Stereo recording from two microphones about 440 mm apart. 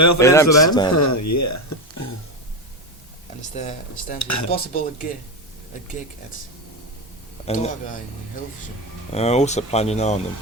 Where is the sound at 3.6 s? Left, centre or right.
Centre.